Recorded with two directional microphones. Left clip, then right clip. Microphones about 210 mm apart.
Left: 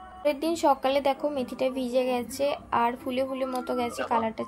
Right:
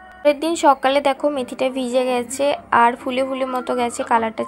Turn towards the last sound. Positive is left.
turn(degrees=-20)  # may be behind; listen again after turning